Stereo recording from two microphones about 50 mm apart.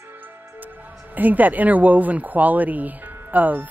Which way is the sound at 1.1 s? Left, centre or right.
Right.